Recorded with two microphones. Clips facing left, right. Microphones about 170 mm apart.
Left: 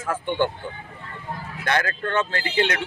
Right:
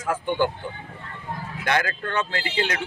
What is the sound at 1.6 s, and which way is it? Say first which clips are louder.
Speech: even; 10° right (ahead or behind).